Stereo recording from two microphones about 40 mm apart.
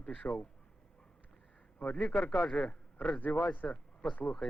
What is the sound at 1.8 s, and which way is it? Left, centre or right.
A man's voice, left.